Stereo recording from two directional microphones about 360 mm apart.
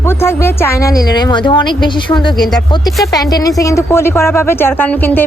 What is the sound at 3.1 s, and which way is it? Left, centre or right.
A woman's voice, centre.